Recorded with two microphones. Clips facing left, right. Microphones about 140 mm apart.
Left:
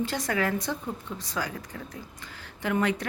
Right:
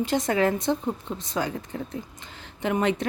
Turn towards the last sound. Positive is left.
turn(degrees=-25)  # may be behind; listen again after turning